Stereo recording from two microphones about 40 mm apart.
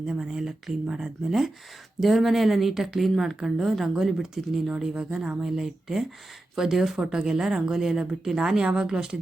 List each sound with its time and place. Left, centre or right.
0.3 s speech: centre
2.0 s speech: centre
5.1 s speech: right
5.5 s speech: centre